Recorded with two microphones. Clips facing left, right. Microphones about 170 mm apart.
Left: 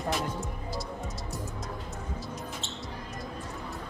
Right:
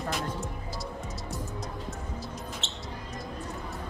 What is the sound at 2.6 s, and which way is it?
Basketball bounce, 75° right (ahead or behind).